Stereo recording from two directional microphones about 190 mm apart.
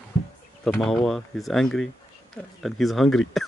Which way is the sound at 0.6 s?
5° left (ahead or behind).